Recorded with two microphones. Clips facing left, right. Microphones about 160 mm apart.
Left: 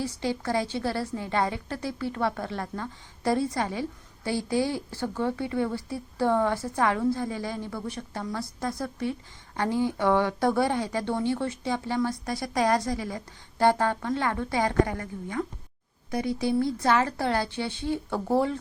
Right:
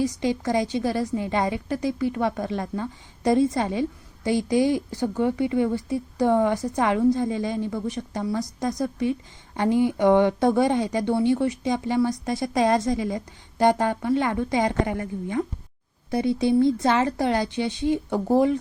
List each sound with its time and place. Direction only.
0.0 s a woman's voice: 15° right (ahead or behind)